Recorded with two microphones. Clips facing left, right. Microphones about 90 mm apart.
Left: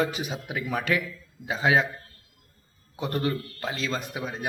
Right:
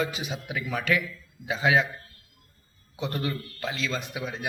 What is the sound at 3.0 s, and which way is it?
A man's voice, 45° left (ahead or behind).